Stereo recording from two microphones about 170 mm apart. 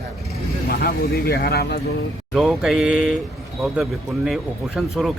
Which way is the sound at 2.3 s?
5° right (ahead or behind).